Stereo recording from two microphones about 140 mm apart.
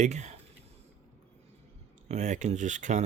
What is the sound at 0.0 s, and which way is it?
Speech, 55° right (ahead or behind).